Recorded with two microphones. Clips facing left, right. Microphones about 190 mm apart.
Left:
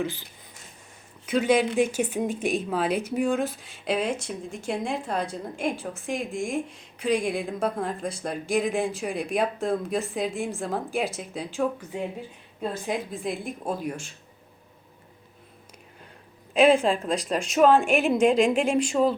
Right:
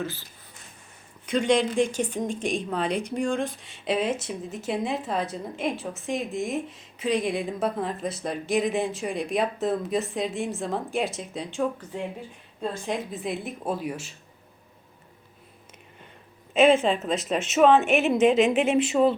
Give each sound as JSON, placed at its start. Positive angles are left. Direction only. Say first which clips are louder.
{"t": 0.0, "sound": "speech", "louder": "left 3 dB", "side_deg": 15}
{"t": 1.3, "sound": "speech", "louder": "left 1 dB", "side_deg": 5}
{"t": 16.6, "sound": "speech", "louder": "even", "side_deg": 0}